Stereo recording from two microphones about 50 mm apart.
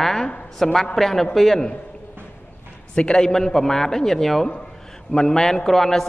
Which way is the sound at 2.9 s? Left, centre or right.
Centre.